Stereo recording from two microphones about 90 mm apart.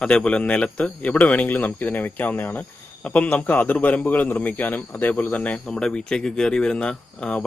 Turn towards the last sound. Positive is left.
turn(degrees=10)  # may be behind; listen again after turning